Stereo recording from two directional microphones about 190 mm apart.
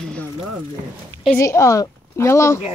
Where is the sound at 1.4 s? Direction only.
15° left (ahead or behind).